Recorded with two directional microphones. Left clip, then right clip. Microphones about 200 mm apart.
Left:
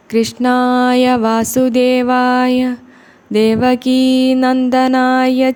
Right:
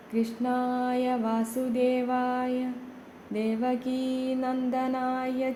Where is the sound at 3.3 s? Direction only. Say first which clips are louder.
Left 17 dB; 40° left (ahead or behind).